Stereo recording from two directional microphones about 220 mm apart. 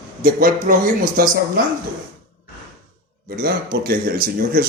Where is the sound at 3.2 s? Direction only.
40° right (ahead or behind).